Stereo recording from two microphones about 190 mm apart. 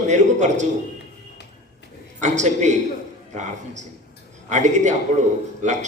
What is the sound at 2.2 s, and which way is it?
Speech, 40° right (ahead or behind).